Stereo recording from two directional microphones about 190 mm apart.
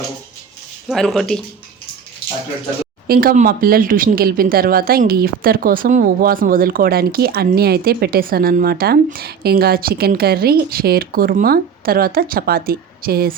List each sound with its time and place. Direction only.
0.9 s speech: centre (ahead or behind)
3.1 s speech: 50° right (ahead or behind)